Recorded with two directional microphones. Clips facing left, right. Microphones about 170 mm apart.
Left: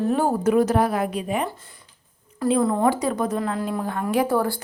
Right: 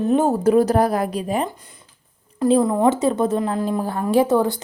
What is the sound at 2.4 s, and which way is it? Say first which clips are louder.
A woman's voice: right 4 dB; 20° right (ahead or behind).